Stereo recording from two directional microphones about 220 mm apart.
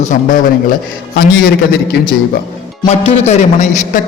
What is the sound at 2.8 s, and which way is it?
A man's voice, 30° left (ahead or behind).